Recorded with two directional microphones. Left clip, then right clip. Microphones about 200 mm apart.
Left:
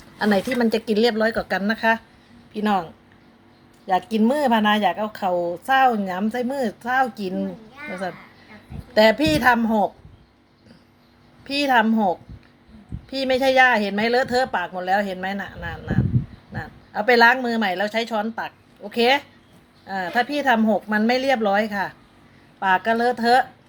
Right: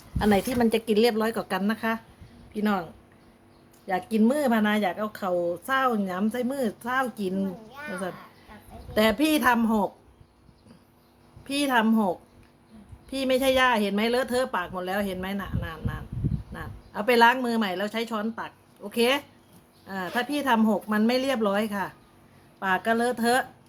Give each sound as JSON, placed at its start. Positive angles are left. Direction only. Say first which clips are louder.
{"t": 0.2, "sound": "speech", "louder": "left 3 dB", "side_deg": -10}
{"t": 4.1, "sound": "speech", "louder": "left 2 dB", "side_deg": -5}
{"t": 11.4, "sound": "a woman's voice", "louder": "left 5 dB", "side_deg": -15}